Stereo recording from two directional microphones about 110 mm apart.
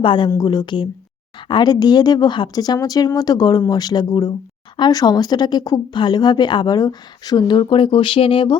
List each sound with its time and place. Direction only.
0.0 s speech: 50° left (ahead or behind)